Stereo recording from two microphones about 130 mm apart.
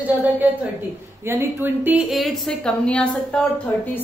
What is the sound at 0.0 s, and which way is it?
A woman's voice, 15° right (ahead or behind).